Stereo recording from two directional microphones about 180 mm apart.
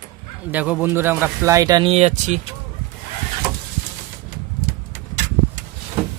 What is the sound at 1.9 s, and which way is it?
Speech, 40° right (ahead or behind).